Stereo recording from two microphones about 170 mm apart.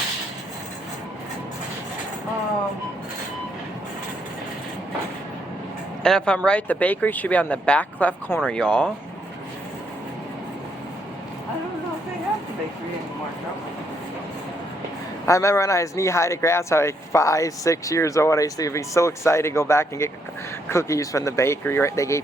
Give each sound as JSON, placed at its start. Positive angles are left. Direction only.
{"t": 6.0, "sound": "speech", "side_deg": 5}
{"t": 15.3, "sound": "speech", "side_deg": 15}